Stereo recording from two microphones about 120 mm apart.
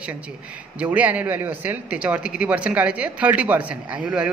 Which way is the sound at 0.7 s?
10° right (ahead or behind).